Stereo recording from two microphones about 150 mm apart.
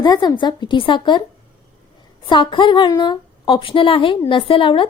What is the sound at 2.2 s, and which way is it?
A woman's voice, 30° left (ahead or behind).